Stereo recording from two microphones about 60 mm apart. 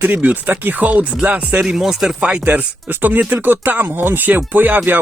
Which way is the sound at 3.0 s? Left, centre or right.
Right.